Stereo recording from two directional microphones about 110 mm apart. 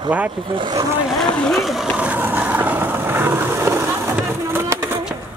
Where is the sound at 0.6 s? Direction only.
45° right (ahead or behind).